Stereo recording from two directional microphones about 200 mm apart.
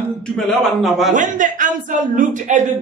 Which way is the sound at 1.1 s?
40° right (ahead or behind).